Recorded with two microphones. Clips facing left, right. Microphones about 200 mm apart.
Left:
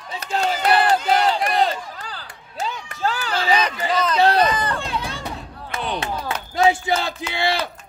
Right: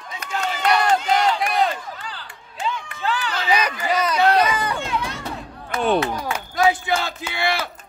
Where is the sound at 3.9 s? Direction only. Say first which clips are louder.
Right 1 dB; 10° right (ahead or behind).